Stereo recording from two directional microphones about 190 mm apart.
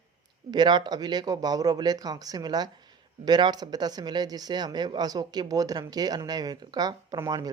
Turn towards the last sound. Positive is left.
turn(degrees=-20)  # may be behind; listen again after turning